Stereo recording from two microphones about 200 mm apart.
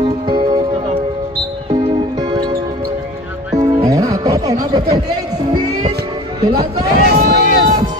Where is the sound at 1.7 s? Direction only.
20° right (ahead or behind).